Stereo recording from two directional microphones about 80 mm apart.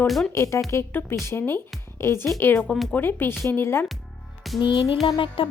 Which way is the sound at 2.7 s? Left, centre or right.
Centre.